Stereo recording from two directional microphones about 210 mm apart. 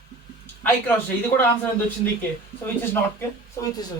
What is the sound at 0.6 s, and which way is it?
Speech, 10° left (ahead or behind).